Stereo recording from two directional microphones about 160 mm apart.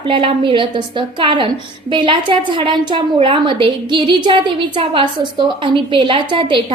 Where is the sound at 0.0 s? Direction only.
35° right (ahead or behind).